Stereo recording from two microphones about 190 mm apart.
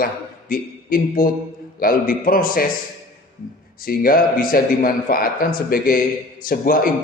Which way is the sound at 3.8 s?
50° left (ahead or behind).